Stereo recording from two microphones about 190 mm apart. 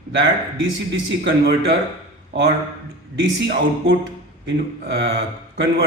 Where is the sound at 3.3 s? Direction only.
65° right (ahead or behind).